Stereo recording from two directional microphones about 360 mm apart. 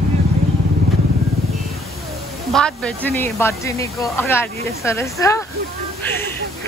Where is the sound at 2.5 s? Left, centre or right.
Centre.